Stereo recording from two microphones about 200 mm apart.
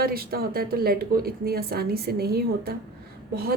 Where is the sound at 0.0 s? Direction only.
50° right (ahead or behind).